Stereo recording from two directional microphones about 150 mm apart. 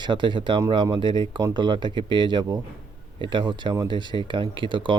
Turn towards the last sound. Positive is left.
turn(degrees=-35)  # may be behind; listen again after turning